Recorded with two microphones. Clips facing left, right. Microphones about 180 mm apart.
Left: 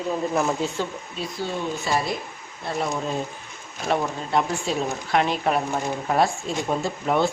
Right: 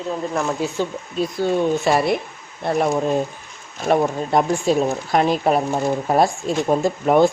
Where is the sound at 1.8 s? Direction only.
65° right (ahead or behind).